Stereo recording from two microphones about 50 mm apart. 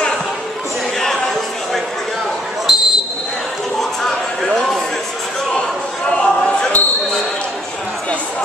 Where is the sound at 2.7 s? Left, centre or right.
Centre.